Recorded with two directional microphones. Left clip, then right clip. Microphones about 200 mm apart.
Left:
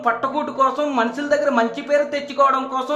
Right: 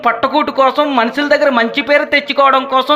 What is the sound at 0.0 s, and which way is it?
Speech, 20° right (ahead or behind).